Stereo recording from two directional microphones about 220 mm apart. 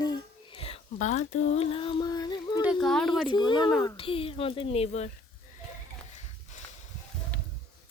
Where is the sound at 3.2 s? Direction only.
20° left (ahead or behind).